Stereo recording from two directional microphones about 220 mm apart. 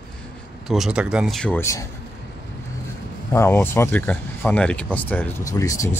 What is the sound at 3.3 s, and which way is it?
Speech, 10° left (ahead or behind).